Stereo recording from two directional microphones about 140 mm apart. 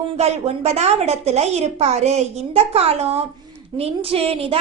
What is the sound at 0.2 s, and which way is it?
A woman's voice, 50° right (ahead or behind).